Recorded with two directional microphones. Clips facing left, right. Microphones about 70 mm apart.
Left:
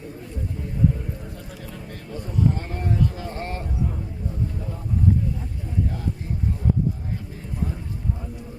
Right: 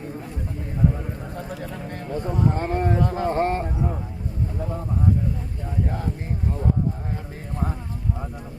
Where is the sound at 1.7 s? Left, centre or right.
Right.